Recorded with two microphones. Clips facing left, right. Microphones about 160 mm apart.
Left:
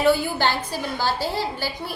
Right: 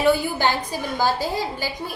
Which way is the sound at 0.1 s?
15° right (ahead or behind).